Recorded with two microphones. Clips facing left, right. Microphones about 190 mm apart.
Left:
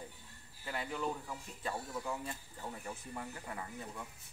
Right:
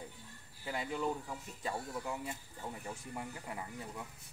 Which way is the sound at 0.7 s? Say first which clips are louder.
Right 2 dB; 15° right (ahead or behind).